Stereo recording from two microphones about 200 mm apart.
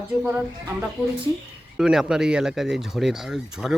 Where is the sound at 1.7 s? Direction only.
Centre (ahead or behind).